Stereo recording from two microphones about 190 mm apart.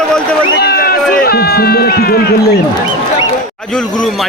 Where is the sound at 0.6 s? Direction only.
55° left (ahead or behind).